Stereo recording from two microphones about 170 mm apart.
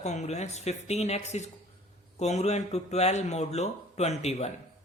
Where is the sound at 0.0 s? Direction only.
40° left (ahead or behind).